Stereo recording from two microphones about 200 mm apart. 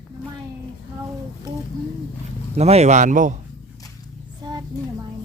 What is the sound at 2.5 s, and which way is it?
Speech, 35° right (ahead or behind).